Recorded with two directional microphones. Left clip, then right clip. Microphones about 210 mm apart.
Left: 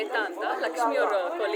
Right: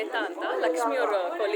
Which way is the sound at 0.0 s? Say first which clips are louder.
Left 1 dB; centre (ahead or behind).